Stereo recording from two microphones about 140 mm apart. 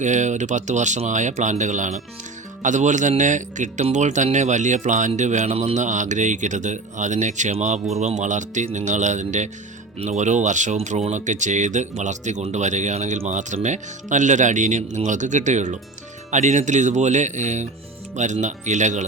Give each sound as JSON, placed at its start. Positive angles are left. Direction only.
{"t": 0.0, "sound": "speech", "side_deg": -60}